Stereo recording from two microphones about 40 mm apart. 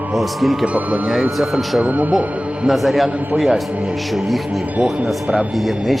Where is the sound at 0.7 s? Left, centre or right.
Right.